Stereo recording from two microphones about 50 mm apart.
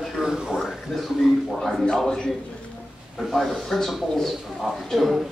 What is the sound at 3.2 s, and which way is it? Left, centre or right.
A man's voice, centre.